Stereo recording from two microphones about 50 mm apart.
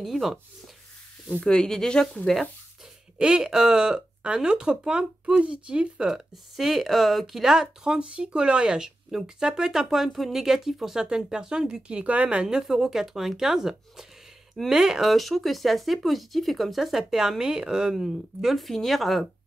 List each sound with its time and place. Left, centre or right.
0.0 s speech: centre
1.4 s speech: centre
3.2 s speech: centre
7.4 s speech: centre
11.0 s speech: centre
12.5 s speech: centre